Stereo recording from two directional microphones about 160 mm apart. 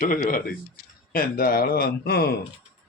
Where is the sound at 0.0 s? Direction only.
60° left (ahead or behind).